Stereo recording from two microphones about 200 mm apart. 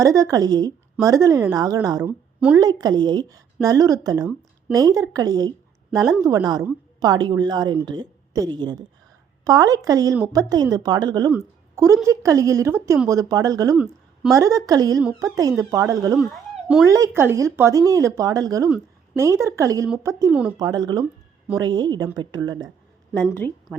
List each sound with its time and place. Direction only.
0.0 s a woman's voice: 15° right (ahead or behind)
13.7 s a sound: centre (ahead or behind)
14.3 s speech: 15° right (ahead or behind)
16.1 s speech: centre (ahead or behind)
16.8 s a woman's voice: 15° right (ahead or behind)